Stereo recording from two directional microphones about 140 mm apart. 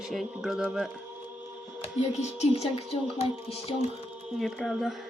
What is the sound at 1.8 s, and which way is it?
Speech, 50° left (ahead or behind).